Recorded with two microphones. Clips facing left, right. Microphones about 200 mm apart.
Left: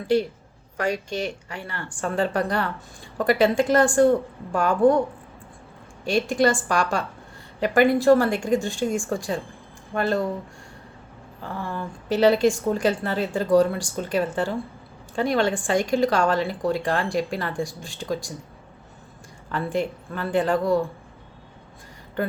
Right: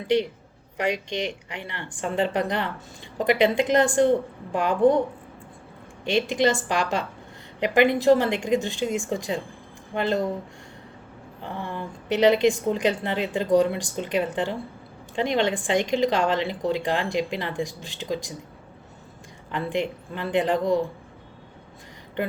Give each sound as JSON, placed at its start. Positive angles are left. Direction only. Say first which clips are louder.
{"t": 0.8, "sound": "a woman's voice", "louder": "even", "side_deg": -20}
{"t": 6.1, "sound": "a woman's voice", "louder": "left 1 dB", "side_deg": -20}
{"t": 11.4, "sound": "a woman's voice", "louder": "left 1 dB", "side_deg": -20}
{"t": 19.5, "sound": "a woman's voice", "louder": "left 1 dB", "side_deg": -20}